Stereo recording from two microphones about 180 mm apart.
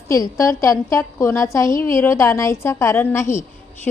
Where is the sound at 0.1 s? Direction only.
15° left (ahead or behind).